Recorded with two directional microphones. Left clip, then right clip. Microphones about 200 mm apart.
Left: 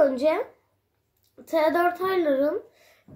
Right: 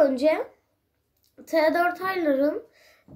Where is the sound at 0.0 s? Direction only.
5° left (ahead or behind).